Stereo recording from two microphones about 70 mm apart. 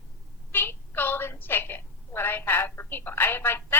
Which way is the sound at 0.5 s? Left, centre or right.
Left.